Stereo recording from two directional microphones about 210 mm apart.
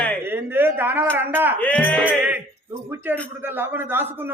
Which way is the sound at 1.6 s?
5° left (ahead or behind).